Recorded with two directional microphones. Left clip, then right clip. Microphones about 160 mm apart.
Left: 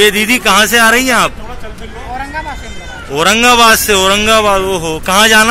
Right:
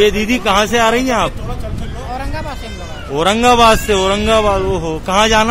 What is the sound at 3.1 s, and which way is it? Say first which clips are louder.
A man's voice: left 3 dB; 15° right (ahead or behind).